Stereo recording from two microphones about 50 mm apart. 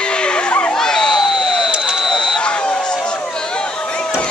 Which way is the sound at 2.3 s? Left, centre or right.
Centre.